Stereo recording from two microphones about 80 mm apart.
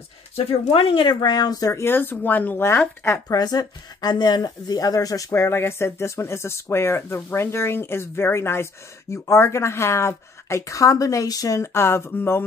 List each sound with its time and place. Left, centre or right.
0.7 s speech: left
1.7 s speech: left
3.3 s speech: left
5.3 s a woman's voice: left